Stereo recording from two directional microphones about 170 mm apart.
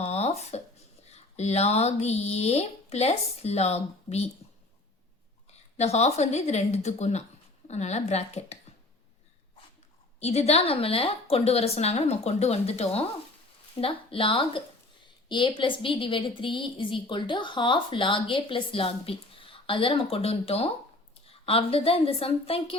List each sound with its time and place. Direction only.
0.0 s a sound: 40° left (ahead or behind)
1.1 s a woman's voice: 40° left (ahead or behind)
5.7 s a woman's voice: 40° left (ahead or behind)
10.2 s a woman's voice: 40° left (ahead or behind)